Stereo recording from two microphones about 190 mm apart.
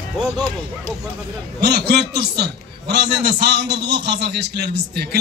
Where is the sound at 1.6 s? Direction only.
55° right (ahead or behind).